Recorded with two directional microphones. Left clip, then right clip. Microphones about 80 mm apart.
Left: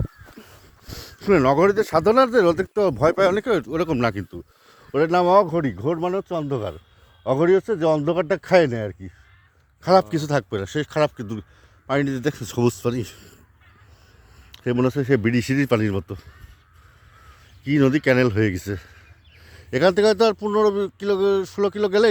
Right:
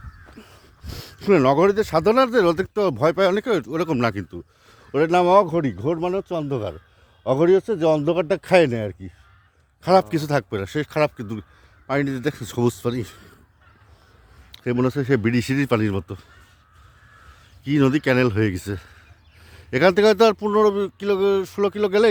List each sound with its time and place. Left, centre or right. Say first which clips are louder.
0.3 s a sound: even; centre
0.9 s a sound: right 1 dB; right
1.7 s speech: left 1 dB; centre
3.8 s speech: even; right
4.9 s speech: right 1 dB; right
5.6 s speech: even; right
9.8 s speech: even; right
10.8 s speech: even; centre
11.9 s a man's voice: left 1 dB; centre
14.5 s speech: left 1 dB; centre
15.0 s speech: even; centre
17.6 s speech: even; centre
19.7 s speech: right 1 dB; right
20.6 s speech: right 1 dB; right